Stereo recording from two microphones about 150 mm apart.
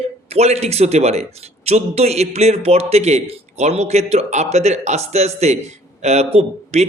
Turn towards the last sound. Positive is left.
turn(degrees=-45)  # may be behind; listen again after turning